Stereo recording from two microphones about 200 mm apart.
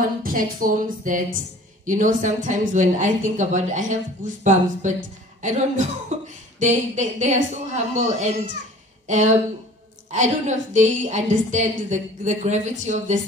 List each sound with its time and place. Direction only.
0.2 s speech: 45° right (ahead or behind)